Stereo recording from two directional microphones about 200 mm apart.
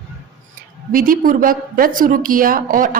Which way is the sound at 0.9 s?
45° right (ahead or behind).